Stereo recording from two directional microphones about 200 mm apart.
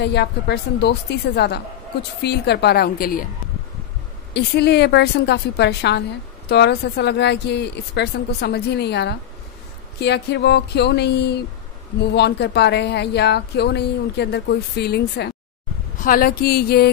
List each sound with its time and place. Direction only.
0.0 s a woman's voice: 55° left (ahead or behind)
4.3 s speech: 55° left (ahead or behind)
16.0 s a woman's voice: 45° left (ahead or behind)